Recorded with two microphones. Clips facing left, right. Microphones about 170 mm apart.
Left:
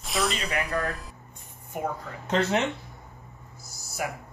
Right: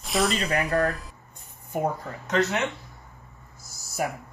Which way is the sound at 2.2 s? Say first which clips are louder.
Even; 30° left (ahead or behind).